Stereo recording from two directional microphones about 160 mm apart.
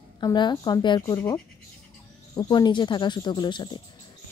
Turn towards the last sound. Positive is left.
turn(degrees=30)  # may be behind; listen again after turning